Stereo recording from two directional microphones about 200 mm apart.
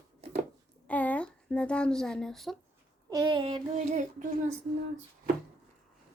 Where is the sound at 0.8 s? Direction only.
5° left (ahead or behind).